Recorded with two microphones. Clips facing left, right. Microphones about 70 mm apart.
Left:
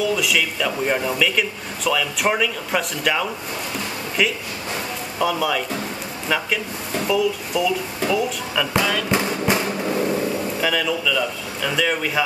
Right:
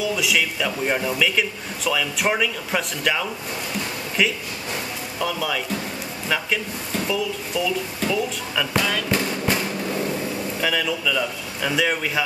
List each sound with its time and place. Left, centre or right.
0.0 s speech: centre
9.1 s a sound: left
10.6 s speech: centre